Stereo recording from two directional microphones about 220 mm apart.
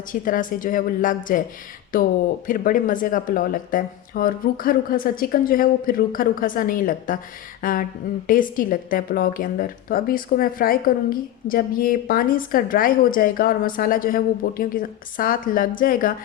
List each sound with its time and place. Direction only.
0.1 s speech: 40° left (ahead or behind)